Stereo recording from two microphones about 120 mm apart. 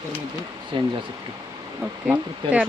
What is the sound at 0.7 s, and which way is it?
Speech, 45° right (ahead or behind).